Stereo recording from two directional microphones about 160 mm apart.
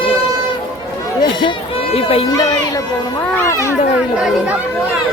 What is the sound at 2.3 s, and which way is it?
Speech, 20° left (ahead or behind).